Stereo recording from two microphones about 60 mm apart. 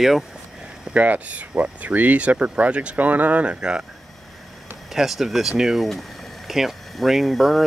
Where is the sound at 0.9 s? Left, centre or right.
Right.